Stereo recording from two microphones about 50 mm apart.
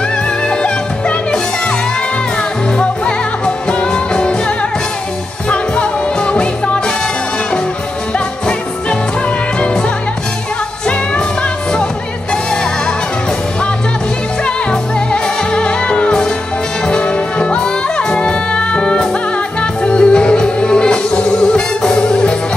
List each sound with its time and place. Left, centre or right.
0.5 s music: centre
2.8 s music: centre
11.7 s music: centre
14.4 s music: centre